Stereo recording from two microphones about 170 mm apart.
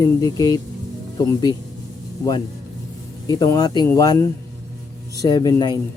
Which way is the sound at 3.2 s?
20° left (ahead or behind).